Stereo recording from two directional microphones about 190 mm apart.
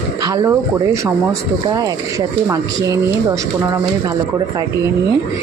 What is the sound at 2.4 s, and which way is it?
Speech, 15° right (ahead or behind).